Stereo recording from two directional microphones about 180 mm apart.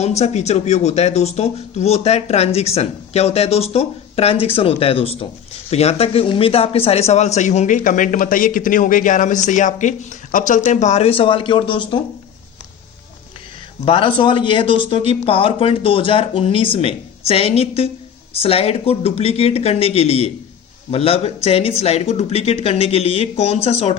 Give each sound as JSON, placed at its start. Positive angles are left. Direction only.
{"t": 0.0, "sound": "a man's voice", "side_deg": 40}
{"t": 13.8, "sound": "speech", "side_deg": 30}